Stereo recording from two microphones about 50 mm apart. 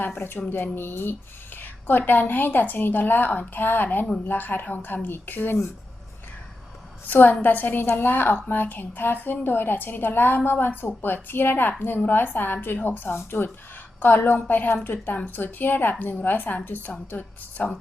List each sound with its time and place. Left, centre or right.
0.2 s a woman's voice: left
7.1 s a woman's voice: left